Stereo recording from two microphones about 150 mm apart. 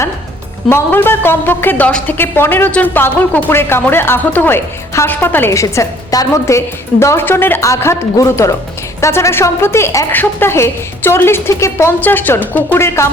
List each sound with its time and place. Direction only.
0.7 s a woman's voice: 15° left (ahead or behind)